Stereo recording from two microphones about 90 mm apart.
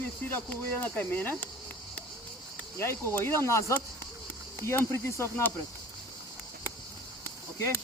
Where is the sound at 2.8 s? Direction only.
30° left (ahead or behind).